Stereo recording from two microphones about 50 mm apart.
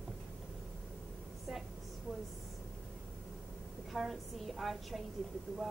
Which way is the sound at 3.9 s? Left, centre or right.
Centre.